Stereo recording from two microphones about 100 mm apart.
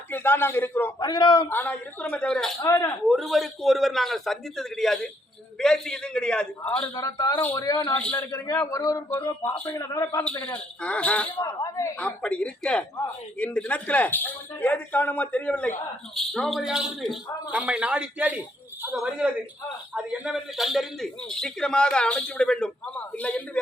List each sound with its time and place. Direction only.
0.1 s a man's voice: 20° left (ahead or behind)
0.9 s a man's voice: 45° left (ahead or behind)
1.5 s speech: 15° left (ahead or behind)
2.6 s a man's voice: 30° left (ahead or behind)
3.1 s a man's voice: centre (ahead or behind)
6.8 s a man's voice: 35° left (ahead or behind)
10.8 s speech: 10° left (ahead or behind)
11.3 s a man's voice: 35° left (ahead or behind)
11.9 s speech: 10° left (ahead or behind)
16.1 s a man's voice: 5° left (ahead or behind)